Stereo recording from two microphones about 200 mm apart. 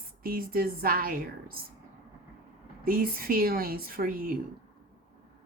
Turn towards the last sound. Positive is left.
turn(degrees=-45)  # may be behind; listen again after turning